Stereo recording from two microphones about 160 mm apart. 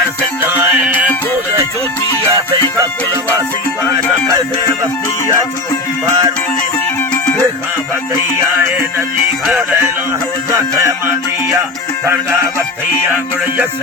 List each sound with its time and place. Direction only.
0.5 s music: 10° right (ahead or behind)
4.3 s music: 20° right (ahead or behind)
6.1 s music: 20° right (ahead or behind)
8.5 s music: 20° right (ahead or behind)
10.5 s music: 15° right (ahead or behind)